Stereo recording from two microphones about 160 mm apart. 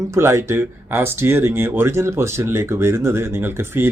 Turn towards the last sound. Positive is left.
turn(degrees=-15)  # may be behind; listen again after turning